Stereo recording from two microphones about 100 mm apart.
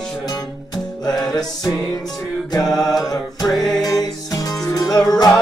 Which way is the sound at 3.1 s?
40° left (ahead or behind).